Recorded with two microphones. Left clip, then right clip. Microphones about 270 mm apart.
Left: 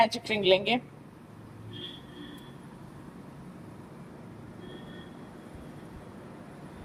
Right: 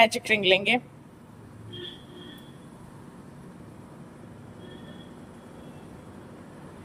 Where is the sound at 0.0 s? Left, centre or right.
Centre.